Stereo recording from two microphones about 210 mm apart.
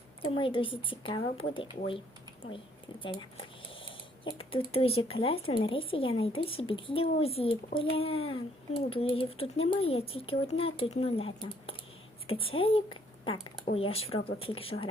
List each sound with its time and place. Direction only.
0.2 s a child's voice: 25° left (ahead or behind)
3.0 s a child's voice: 25° left (ahead or behind)